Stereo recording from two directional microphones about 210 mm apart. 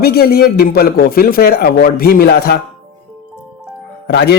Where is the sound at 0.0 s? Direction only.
50° left (ahead or behind).